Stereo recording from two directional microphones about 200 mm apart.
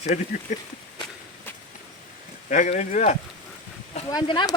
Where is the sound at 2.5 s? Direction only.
35° left (ahead or behind).